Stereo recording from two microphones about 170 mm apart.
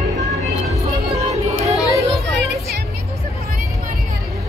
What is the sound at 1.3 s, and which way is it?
Music, 40° right (ahead or behind).